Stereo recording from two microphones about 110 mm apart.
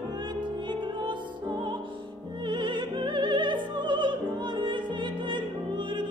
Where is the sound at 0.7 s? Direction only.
45° right (ahead or behind).